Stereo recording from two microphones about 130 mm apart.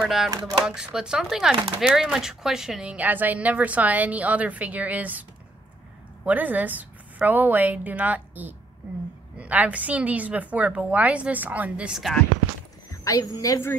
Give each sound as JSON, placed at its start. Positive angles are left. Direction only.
{"t": 0.0, "sound": "speech", "side_deg": 0}
{"t": 6.2, "sound": "speech", "side_deg": -10}
{"t": 12.9, "sound": "a woman's voice", "side_deg": 25}